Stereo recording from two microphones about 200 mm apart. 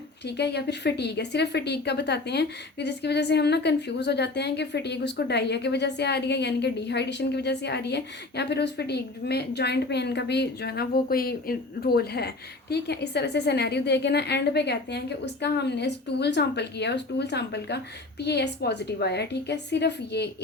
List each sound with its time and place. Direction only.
0.3 s speech: 55° left (ahead or behind)